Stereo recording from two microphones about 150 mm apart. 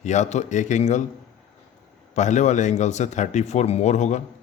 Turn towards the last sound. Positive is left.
turn(degrees=50)  # may be behind; listen again after turning